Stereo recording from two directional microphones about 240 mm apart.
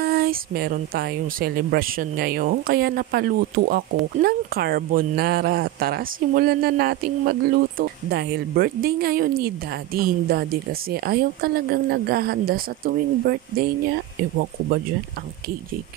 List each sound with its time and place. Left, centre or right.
0.0 s speech: right